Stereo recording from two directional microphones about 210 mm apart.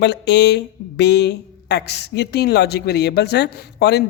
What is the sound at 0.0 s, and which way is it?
A woman's voice, 55° left (ahead or behind).